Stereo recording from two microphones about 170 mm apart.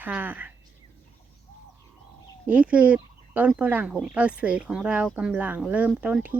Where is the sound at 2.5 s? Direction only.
5° right (ahead or behind).